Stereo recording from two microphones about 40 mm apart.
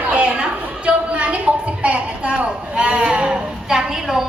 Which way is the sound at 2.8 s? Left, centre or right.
Right.